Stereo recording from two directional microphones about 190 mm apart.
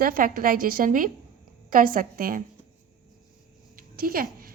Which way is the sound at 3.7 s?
50° right (ahead or behind).